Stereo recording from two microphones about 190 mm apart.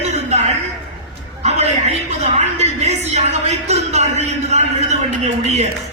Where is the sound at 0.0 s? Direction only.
35° right (ahead or behind).